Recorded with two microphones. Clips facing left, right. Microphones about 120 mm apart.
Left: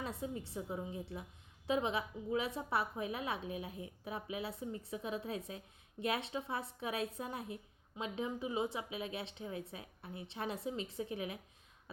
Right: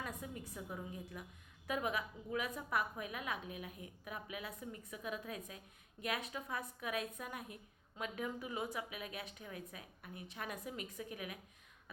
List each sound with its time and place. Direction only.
0.0 s a woman's voice: 30° left (ahead or behind)